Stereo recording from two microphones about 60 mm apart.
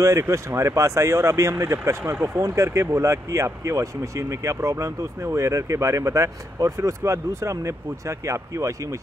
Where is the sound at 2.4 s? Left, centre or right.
Right.